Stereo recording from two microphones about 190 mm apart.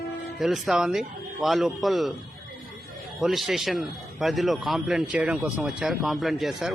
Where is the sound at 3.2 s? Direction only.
Centre (ahead or behind).